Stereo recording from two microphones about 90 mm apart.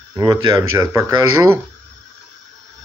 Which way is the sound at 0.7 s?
30° right (ahead or behind).